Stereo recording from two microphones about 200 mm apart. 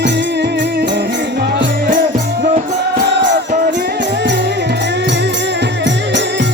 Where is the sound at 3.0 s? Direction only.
65° right (ahead or behind).